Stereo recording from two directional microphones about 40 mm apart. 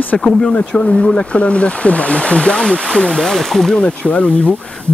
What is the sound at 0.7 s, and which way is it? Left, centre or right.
Speech, left.